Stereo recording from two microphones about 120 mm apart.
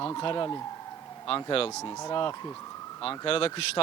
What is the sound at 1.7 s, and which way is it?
Speech, 25° left (ahead or behind).